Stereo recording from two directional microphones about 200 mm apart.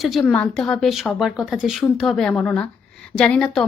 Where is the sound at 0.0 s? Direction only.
Centre (ahead or behind).